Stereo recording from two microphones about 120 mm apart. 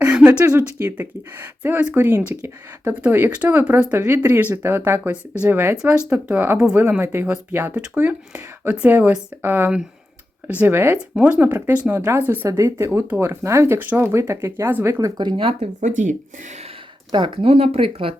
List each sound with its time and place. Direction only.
0.0 s a sound: 10° right (ahead or behind)
0.8 s speech: 15° right (ahead or behind)
15.2 s speech: 45° right (ahead or behind)
15.8 s speech: 90° right
17.1 s speech: 40° right (ahead or behind)